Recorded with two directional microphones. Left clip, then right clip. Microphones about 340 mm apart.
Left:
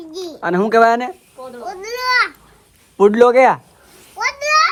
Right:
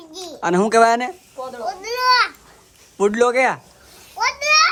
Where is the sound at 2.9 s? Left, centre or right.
Centre.